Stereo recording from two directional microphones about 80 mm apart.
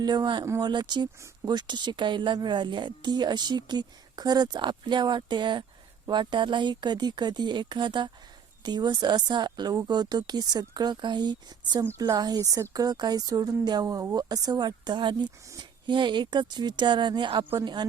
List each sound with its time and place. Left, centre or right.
0.0 s speech: right